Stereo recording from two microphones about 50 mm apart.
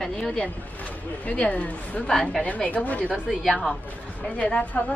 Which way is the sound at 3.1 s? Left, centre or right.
Centre.